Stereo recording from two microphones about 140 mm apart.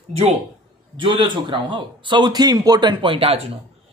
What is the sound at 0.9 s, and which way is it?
Speech, 35° right (ahead or behind).